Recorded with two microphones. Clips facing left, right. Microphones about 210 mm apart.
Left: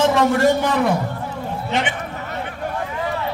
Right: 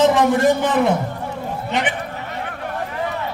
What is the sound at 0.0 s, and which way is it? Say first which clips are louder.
Speech: right 1 dB; 20° right (ahead or behind).